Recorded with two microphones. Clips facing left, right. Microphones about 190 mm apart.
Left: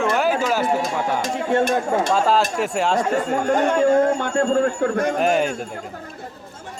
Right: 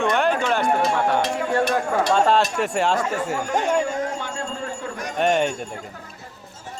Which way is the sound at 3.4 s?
55° left (ahead or behind).